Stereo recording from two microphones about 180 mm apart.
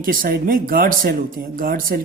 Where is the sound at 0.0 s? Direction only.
50° right (ahead or behind).